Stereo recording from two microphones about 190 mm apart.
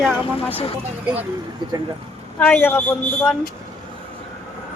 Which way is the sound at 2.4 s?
10° left (ahead or behind).